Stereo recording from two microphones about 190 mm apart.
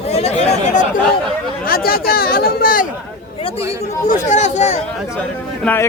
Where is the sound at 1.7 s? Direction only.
50° left (ahead or behind).